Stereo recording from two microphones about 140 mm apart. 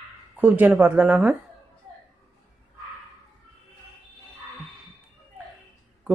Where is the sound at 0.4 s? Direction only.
10° right (ahead or behind).